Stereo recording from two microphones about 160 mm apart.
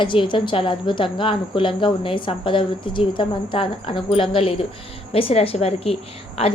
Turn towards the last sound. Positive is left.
turn(degrees=40)  # may be behind; listen again after turning